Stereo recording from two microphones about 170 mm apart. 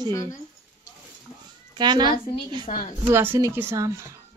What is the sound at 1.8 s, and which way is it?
Speech, 25° right (ahead or behind).